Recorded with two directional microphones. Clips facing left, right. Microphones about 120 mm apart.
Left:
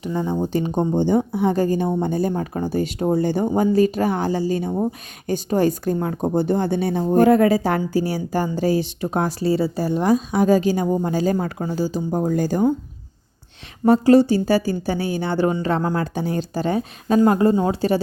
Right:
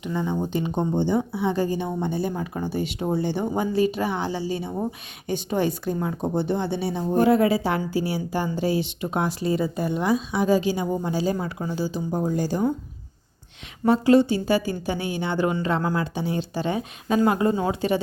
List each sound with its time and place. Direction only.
0.0 s speech: 35° left (ahead or behind)
13.8 s speech: 40° left (ahead or behind)